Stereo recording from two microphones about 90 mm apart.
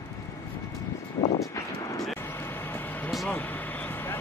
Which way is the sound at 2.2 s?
25° left (ahead or behind).